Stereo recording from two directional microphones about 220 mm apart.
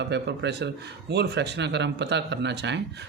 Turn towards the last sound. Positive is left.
turn(degrees=-50)  # may be behind; listen again after turning